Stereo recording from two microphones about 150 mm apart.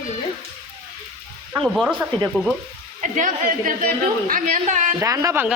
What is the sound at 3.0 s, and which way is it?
A woman's voice, 60° right (ahead or behind).